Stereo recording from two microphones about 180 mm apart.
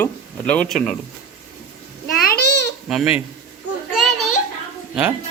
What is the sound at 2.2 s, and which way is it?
Babbling, 60° left (ahead or behind).